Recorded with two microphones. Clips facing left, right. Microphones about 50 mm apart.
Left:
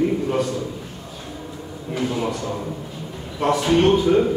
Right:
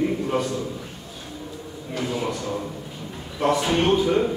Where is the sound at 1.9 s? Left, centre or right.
Centre.